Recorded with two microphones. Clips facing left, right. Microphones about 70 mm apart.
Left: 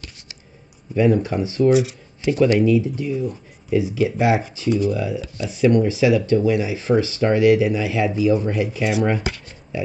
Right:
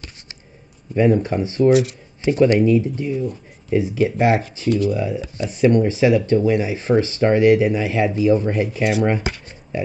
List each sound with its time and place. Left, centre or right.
0.9 s speech: right
1.7 s speech: centre
2.2 s speech: right
4.6 s speech: centre
4.9 s speech: right
9.0 s shuffling cards: right